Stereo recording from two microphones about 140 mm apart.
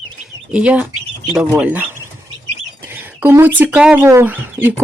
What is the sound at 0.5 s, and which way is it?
Speech, 10° right (ahead or behind).